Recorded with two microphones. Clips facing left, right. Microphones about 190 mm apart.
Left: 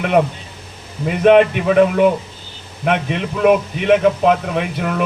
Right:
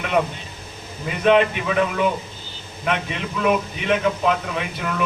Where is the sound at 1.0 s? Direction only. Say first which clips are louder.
Left 6 dB; 50° left (ahead or behind).